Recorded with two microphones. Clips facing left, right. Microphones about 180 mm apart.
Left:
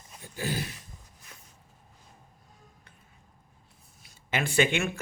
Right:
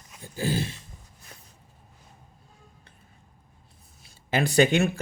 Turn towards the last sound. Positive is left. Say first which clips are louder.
# right 5 dB
turn(degrees=-40)  # may be behind; listen again after turning